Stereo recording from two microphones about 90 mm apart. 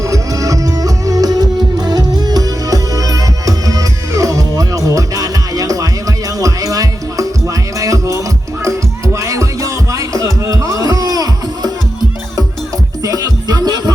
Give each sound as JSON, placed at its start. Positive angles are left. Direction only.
{"t": 0.0, "sound": "music", "side_deg": -35}
{"t": 13.0, "sound": "music", "side_deg": -45}